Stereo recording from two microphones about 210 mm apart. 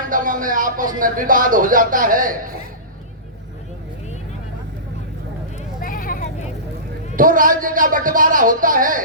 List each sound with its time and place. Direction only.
0.1 s speech: 40° right (ahead or behind)
5.5 s a sound: 40° left (ahead or behind)
7.2 s speech: 40° right (ahead or behind)